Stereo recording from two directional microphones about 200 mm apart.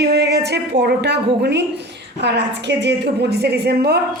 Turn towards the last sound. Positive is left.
turn(degrees=-55)  # may be behind; listen again after turning